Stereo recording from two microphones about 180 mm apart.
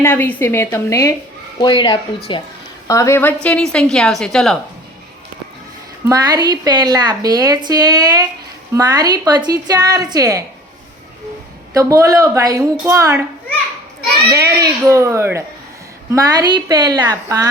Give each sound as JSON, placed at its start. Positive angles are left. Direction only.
{"t": 0.0, "sound": "a woman's voice", "side_deg": 10}
{"t": 2.8, "sound": "a woman's voice", "side_deg": 15}
{"t": 6.1, "sound": "a woman's voice", "side_deg": -20}
{"t": 11.7, "sound": "a woman's voice", "side_deg": -20}
{"t": 14.3, "sound": "a child's voice", "side_deg": -15}